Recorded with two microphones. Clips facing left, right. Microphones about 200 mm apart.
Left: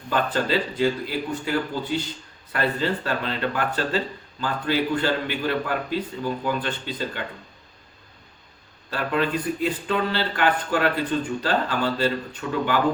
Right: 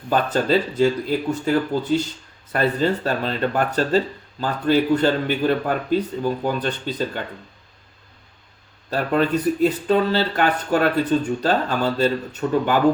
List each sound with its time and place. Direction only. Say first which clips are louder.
0.1 s speech: right 4 dB; 45° right (ahead or behind)
8.9 s speech: right 5 dB; 45° right (ahead or behind)